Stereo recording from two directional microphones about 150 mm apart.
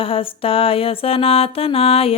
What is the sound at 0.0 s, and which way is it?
Music, 35° left (ahead or behind).